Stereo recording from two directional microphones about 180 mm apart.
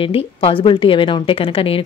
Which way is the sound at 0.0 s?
30° left (ahead or behind).